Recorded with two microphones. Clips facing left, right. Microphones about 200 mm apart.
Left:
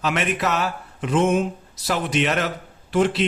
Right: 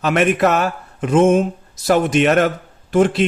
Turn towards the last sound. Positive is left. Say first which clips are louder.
# right 5 dB
turn(degrees=-50)  # may be behind; listen again after turning